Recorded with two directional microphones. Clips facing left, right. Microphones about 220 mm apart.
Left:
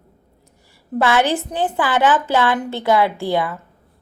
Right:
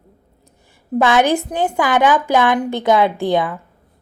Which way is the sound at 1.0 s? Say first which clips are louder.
Right 3 dB; 15° right (ahead or behind).